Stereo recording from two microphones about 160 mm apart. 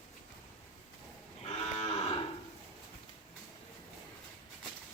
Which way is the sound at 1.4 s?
40° left (ahead or behind).